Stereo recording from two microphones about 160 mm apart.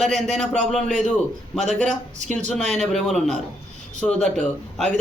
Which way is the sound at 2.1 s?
45° right (ahead or behind).